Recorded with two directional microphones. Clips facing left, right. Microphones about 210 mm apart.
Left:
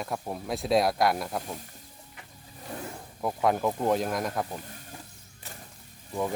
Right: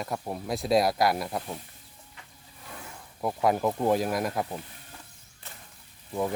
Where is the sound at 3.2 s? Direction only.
5° right (ahead or behind).